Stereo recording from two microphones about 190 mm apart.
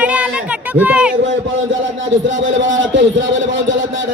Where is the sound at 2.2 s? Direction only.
85° right.